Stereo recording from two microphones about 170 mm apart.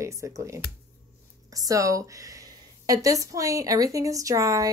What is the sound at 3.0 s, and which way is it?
A woman's voice, 20° right (ahead or behind).